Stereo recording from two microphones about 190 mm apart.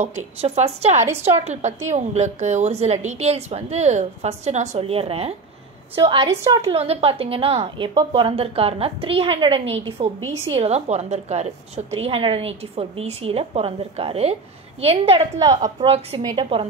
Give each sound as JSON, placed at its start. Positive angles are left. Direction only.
{"t": 0.4, "sound": "a woman's voice", "side_deg": -35}
{"t": 1.0, "sound": "a woman's voice", "side_deg": -10}
{"t": 1.3, "sound": "a woman's voice", "side_deg": -35}
{"t": 6.7, "sound": "a woman's voice", "side_deg": -30}
{"t": 15.3, "sound": "a woman's voice", "side_deg": -20}